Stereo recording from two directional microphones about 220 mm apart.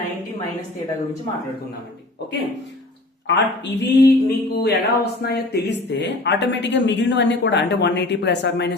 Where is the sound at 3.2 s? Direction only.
55° left (ahead or behind).